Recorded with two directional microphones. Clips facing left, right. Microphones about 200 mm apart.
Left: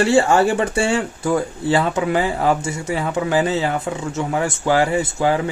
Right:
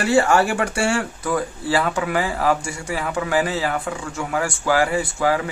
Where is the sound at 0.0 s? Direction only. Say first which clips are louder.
Left 2 dB; 25° left (ahead or behind).